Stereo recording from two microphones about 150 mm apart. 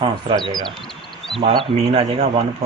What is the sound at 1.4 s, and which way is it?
Speech, 40° right (ahead or behind).